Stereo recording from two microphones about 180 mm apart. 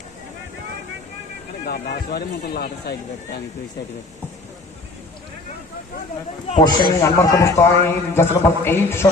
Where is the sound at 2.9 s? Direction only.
60° left (ahead or behind).